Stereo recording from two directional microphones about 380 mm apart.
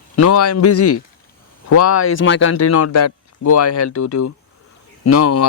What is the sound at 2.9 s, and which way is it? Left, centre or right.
Speech, left.